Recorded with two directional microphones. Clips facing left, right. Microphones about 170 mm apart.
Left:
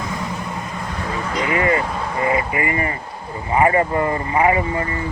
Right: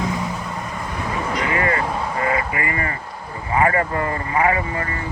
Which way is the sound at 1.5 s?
20° left (ahead or behind).